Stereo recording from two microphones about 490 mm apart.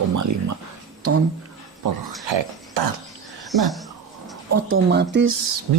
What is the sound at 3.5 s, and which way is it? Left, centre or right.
Speech, centre.